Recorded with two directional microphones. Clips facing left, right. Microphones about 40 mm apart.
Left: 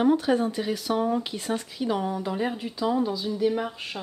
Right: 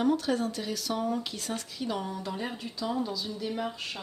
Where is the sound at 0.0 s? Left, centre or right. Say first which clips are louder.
Left 5 dB; left.